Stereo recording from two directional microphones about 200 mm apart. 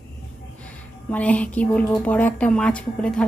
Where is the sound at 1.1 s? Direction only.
5° left (ahead or behind).